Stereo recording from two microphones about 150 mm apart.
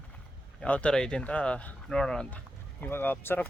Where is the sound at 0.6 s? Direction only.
10° left (ahead or behind).